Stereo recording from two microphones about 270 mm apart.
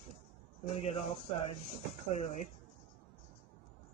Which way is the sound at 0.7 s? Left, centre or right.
Left.